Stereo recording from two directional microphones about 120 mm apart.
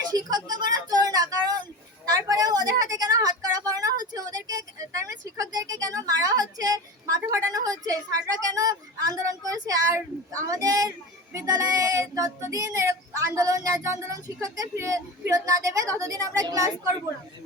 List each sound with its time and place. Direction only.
0.0 s a sound: 35° right (ahead or behind)
7.5 s a woman's voice: 30° right (ahead or behind)
11.3 s child singing: 30° right (ahead or behind)